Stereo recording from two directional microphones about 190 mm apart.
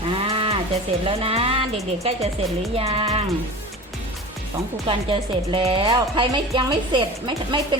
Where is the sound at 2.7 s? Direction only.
30° right (ahead or behind).